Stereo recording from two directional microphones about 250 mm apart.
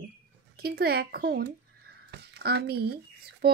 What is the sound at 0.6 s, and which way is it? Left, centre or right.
Speech, right.